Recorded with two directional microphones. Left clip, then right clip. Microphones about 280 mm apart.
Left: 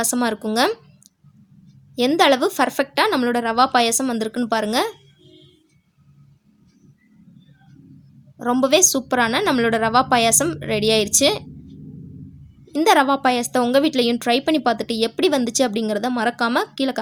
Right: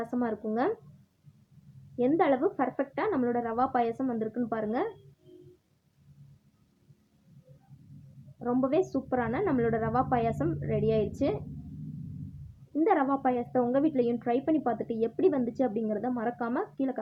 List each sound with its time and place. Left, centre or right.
0.0 s a woman's voice: left
2.0 s a woman's voice: left
8.4 s a woman's voice: left
12.7 s a woman's voice: left